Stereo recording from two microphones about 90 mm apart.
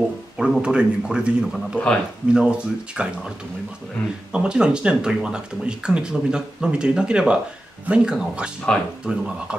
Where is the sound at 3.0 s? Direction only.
10° right (ahead or behind).